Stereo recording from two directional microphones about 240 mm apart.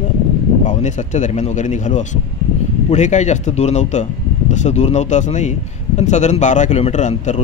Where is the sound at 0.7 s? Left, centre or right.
Left.